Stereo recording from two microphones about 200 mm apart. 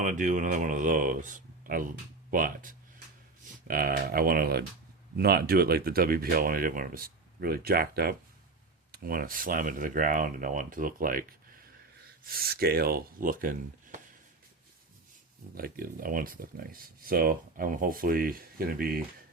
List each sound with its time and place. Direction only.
0.0 s speech: 40° right (ahead or behind)
12.3 s speech: 50° right (ahead or behind)
15.5 s speech: 45° right (ahead or behind)